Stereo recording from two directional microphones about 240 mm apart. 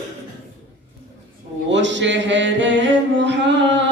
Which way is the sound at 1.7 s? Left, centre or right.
Right.